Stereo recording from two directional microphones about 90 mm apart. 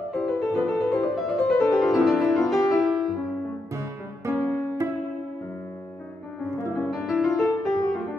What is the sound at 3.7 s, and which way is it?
Music, 35° right (ahead or behind).